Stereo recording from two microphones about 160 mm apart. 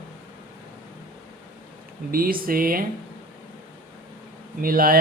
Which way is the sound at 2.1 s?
65° right (ahead or behind).